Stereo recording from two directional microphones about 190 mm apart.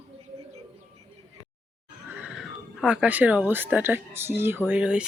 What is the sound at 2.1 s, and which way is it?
A woman's voice, 5° right (ahead or behind).